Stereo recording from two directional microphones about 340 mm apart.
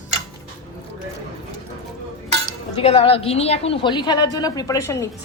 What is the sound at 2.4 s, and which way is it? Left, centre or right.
Speech, centre.